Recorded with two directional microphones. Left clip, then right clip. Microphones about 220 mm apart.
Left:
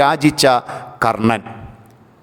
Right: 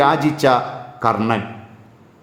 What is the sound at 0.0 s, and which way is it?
A man's voice, 45° left (ahead or behind).